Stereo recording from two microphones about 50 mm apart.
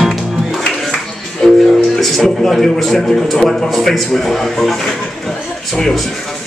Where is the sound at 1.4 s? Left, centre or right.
Centre.